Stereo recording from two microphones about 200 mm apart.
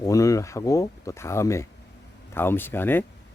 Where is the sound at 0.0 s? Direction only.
15° left (ahead or behind).